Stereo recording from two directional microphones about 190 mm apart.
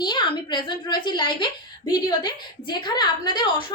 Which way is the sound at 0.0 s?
25° left (ahead or behind).